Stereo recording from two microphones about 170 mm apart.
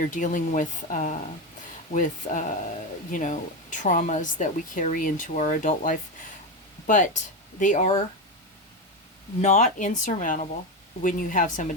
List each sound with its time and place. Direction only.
0.0 s speech: 50° left (ahead or behind)
9.4 s speech: 45° left (ahead or behind)